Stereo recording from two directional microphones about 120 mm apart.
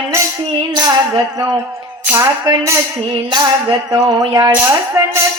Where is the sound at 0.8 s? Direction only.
30° right (ahead or behind).